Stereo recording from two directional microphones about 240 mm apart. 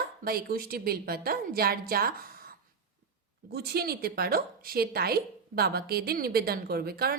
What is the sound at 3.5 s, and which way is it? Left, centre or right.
A woman's voice, right.